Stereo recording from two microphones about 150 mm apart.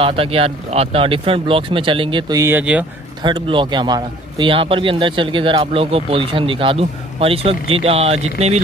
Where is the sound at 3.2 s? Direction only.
30° right (ahead or behind).